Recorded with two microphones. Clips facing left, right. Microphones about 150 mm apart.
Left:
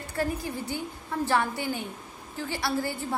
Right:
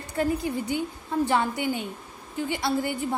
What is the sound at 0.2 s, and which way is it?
A woman's voice, 20° right (ahead or behind).